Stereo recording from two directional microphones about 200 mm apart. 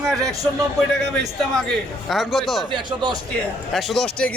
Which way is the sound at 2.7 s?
20° right (ahead or behind).